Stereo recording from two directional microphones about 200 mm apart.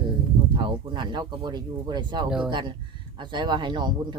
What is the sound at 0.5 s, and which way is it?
A man's voice, 25° right (ahead or behind).